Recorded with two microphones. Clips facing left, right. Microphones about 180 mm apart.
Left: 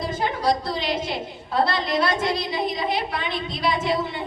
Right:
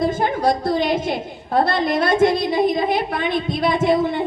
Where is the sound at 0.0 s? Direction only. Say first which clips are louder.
Right 5 dB; 50° right (ahead or behind).